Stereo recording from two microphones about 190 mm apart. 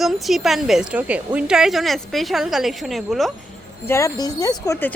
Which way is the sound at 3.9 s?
15° left (ahead or behind).